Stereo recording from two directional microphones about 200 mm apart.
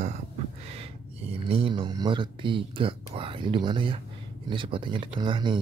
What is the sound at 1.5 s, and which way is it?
Speech, 25° right (ahead or behind).